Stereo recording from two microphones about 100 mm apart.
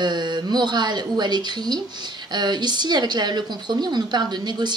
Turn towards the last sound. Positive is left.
turn(degrees=-45)  # may be behind; listen again after turning